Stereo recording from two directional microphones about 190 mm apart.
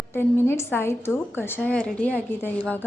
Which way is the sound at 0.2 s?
10° left (ahead or behind).